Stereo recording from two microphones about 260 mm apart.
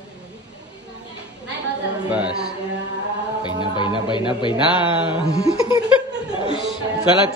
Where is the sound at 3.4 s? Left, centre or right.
Centre.